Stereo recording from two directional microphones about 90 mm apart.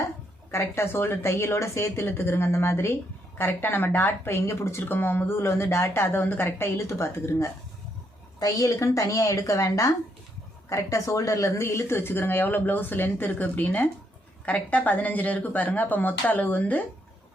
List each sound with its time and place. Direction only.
0.5 s a woman's voice: 30° left (ahead or behind)